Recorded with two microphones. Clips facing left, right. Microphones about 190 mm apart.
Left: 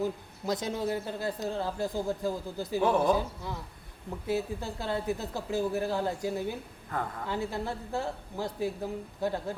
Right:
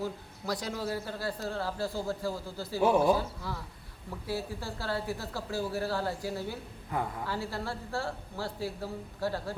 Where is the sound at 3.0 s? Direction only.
20° left (ahead or behind).